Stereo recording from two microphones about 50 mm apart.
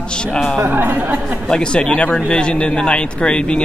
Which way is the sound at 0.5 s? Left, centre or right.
Right.